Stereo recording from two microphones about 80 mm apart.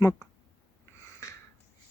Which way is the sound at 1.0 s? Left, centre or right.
Left.